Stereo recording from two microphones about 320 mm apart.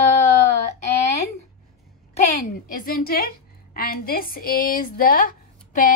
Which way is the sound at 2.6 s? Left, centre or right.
Left.